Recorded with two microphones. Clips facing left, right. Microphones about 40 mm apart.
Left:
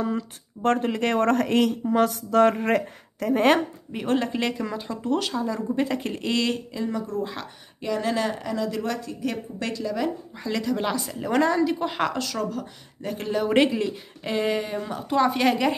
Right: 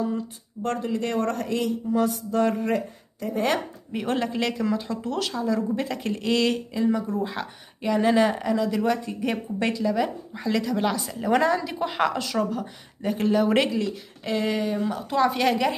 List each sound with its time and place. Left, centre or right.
0.6 s speech: left
3.9 s speech: centre
9.0 s a woman's voice: right
9.8 s speech: centre
13.7 s speech: centre
14.3 s speech: centre